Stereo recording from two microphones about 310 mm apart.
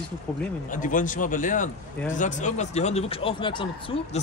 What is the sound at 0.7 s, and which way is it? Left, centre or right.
Speech, left.